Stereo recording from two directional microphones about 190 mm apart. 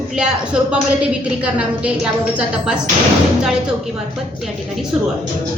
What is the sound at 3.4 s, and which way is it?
Speech, 5° right (ahead or behind).